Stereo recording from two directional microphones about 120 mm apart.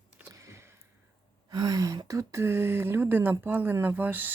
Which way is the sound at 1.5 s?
35° right (ahead or behind).